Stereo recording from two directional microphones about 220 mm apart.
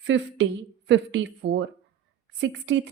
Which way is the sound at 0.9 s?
55° right (ahead or behind).